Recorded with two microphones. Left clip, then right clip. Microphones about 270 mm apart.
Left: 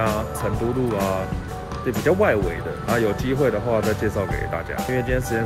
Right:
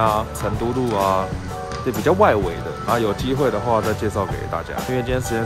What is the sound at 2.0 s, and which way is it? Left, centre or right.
Speech, centre.